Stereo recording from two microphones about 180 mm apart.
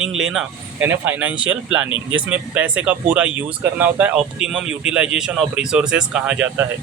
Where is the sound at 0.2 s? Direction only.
5° right (ahead or behind).